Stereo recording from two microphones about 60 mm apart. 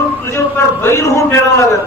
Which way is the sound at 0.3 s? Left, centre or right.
Left.